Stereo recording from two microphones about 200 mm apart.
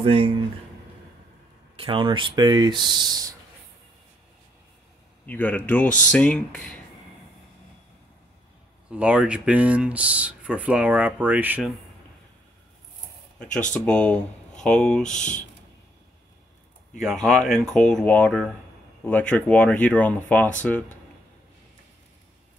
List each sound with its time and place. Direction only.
0.0 s speech: 25° right (ahead or behind)
1.8 s speech: 25° right (ahead or behind)
5.2 s speech: 10° left (ahead or behind)
8.9 s speech: 5° right (ahead or behind)
13.7 s speech: 5° left (ahead or behind)
17.0 s speech: centre (ahead or behind)